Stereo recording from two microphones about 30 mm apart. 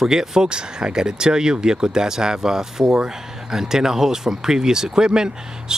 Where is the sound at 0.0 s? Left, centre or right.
Centre.